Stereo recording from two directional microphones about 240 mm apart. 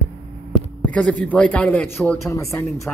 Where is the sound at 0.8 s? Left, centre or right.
Centre.